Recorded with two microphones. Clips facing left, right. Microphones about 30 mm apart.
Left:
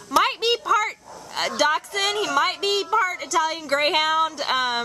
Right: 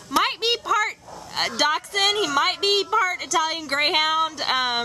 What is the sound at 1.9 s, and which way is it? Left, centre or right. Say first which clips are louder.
Speech: right 1 dB; right.